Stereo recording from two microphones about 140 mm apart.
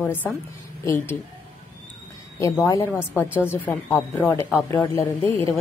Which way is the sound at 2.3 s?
20° left (ahead or behind).